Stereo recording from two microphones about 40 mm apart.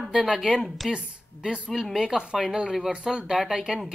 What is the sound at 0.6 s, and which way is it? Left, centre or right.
Speech, centre.